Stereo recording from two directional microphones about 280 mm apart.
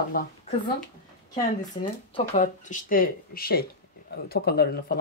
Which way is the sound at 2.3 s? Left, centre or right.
Left.